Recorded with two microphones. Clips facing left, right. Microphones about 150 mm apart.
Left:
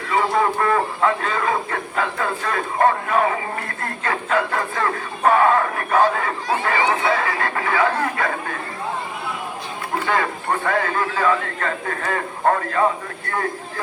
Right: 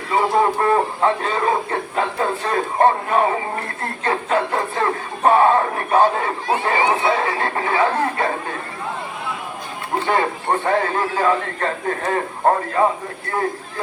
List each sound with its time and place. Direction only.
0.1 s speech: 30° right (ahead or behind)
10.1 s speech: 30° right (ahead or behind)